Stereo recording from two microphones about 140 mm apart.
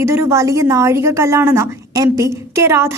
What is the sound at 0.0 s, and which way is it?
A woman's voice, 15° right (ahead or behind).